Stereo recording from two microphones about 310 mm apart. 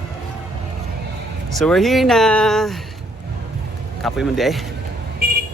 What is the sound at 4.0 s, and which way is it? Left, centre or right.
Speech, centre.